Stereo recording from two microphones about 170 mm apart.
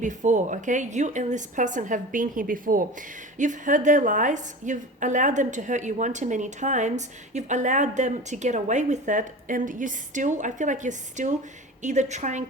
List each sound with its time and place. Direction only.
0.0 s a woman's voice: 45° right (ahead or behind)